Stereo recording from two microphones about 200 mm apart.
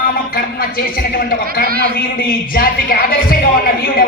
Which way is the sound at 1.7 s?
50° right (ahead or behind).